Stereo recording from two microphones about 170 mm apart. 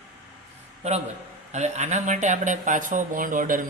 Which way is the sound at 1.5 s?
45° right (ahead or behind).